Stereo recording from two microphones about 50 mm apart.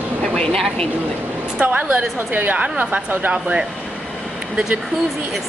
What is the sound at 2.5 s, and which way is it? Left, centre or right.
Speech, right.